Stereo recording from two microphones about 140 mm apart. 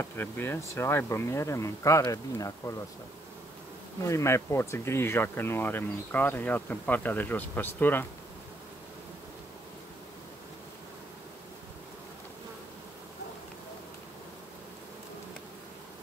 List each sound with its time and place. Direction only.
0.0 s speech: 15° left (ahead or behind)
4.0 s speech: 20° left (ahead or behind)